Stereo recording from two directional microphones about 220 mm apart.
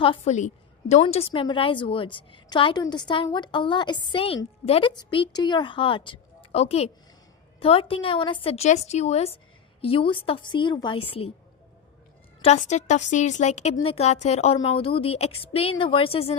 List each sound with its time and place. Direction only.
0.0 s a woman's voice: 25° left (ahead or behind)
12.4 s a woman's voice: 30° left (ahead or behind)